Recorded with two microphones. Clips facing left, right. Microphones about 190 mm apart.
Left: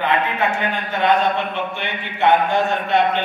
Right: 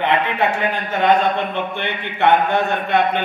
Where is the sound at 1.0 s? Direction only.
55° right (ahead or behind).